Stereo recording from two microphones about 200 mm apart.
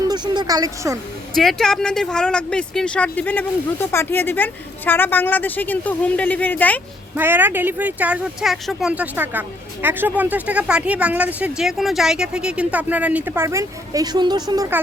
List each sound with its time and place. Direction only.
0.1 s speech: 20° right (ahead or behind)
1.4 s speech: centre (ahead or behind)
7.2 s speech: 10° right (ahead or behind)